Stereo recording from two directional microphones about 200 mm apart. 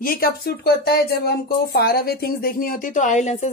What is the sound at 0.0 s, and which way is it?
Speech, 50° left (ahead or behind).